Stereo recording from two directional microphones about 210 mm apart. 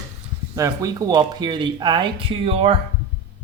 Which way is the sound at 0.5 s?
15° right (ahead or behind).